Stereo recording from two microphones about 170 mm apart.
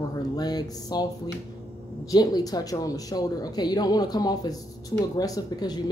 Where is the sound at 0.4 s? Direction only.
25° left (ahead or behind).